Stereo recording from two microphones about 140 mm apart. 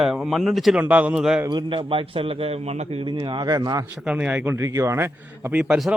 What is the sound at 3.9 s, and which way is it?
A man's voice, 10° right (ahead or behind).